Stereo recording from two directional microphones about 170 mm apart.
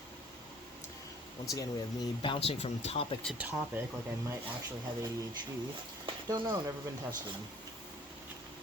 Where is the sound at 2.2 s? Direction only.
30° left (ahead or behind).